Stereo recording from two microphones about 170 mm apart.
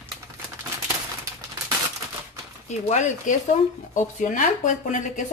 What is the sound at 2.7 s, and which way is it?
Speech, 45° left (ahead or behind).